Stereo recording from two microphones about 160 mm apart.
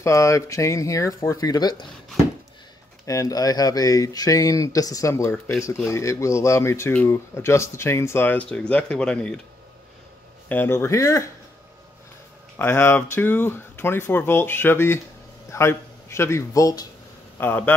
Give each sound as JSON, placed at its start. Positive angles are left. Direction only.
{"t": 0.0, "sound": "speech", "side_deg": 20}
{"t": 3.1, "sound": "speech", "side_deg": 20}
{"t": 10.5, "sound": "speech", "side_deg": 15}
{"t": 12.5, "sound": "a man's voice", "side_deg": 15}